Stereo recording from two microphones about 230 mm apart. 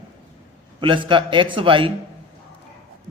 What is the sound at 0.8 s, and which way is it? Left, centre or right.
A man's voice, right.